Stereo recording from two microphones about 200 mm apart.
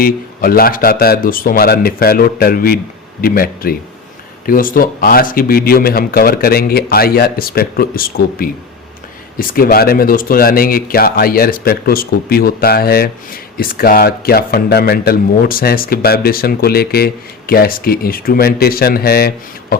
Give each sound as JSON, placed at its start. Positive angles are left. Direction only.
{"t": 0.0, "sound": "speech", "side_deg": 50}